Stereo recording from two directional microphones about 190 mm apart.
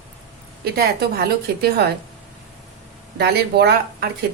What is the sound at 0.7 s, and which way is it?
A woman's voice, 55° right (ahead or behind).